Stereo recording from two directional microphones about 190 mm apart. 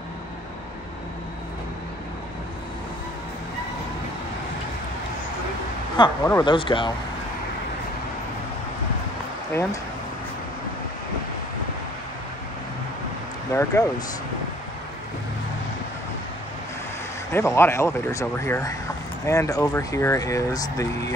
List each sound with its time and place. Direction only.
6.0 s speech: 25° left (ahead or behind)
9.5 s speech: 15° left (ahead or behind)
13.5 s speech: 15° left (ahead or behind)
17.3 s speech: 15° left (ahead or behind)